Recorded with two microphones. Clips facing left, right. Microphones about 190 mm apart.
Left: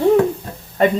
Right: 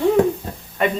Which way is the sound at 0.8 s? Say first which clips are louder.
Left 5 dB; 35° left (ahead or behind).